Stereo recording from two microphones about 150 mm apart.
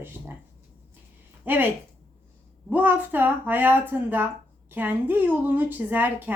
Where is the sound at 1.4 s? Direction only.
10° right (ahead or behind).